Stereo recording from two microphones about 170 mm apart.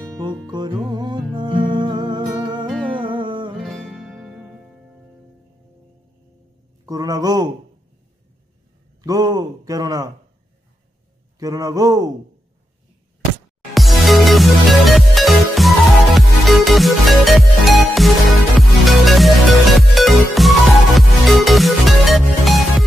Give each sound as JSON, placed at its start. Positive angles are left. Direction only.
{"t": 0.0, "sound": "music", "side_deg": -25}
{"t": 3.5, "sound": "music", "side_deg": 0}
{"t": 6.9, "sound": "speech", "side_deg": -20}
{"t": 9.0, "sound": "a sound", "side_deg": -20}
{"t": 11.3, "sound": "speech", "side_deg": -20}
{"t": 13.7, "sound": "music", "side_deg": 0}